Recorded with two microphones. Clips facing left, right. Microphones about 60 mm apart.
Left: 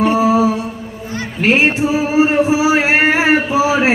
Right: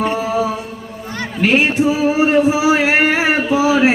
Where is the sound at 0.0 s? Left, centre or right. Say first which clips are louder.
Left 5 dB; centre.